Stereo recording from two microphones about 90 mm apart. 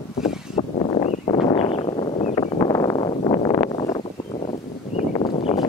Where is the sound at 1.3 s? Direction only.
70° left (ahead or behind).